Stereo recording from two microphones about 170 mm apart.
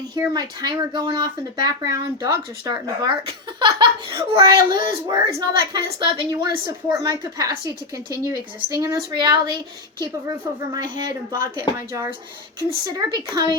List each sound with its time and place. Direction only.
0.2 s speech: 25° right (ahead or behind)
12.5 s speech: 25° right (ahead or behind)